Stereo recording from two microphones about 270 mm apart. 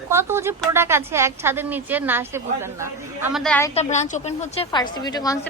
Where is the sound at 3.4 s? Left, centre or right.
Centre.